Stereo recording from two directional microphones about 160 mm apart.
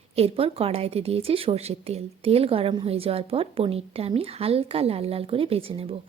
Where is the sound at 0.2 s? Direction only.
35° right (ahead or behind).